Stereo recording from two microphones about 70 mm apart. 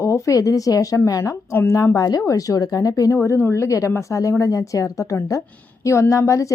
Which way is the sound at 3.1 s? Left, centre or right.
Left.